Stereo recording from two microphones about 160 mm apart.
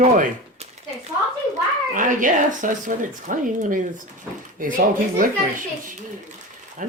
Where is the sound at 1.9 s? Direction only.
55° right (ahead or behind).